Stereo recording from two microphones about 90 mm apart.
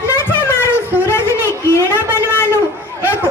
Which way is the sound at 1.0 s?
25° left (ahead or behind).